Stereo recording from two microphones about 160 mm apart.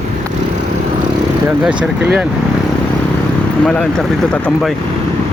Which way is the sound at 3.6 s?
5° left (ahead or behind).